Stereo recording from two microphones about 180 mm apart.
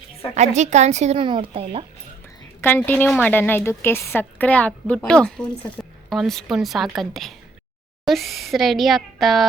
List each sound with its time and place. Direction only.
0.3 s a woman's voice: 40° right (ahead or behind)
1.2 s speech: 25° right (ahead or behind)
2.6 s a woman's voice: 10° left (ahead or behind)